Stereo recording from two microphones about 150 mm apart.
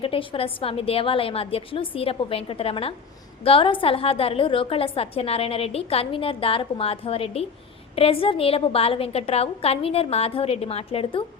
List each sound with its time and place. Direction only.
0.0 s a woman's voice: 40° left (ahead or behind)